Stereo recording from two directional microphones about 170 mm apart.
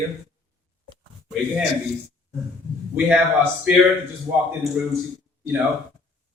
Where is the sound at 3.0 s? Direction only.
10° right (ahead or behind).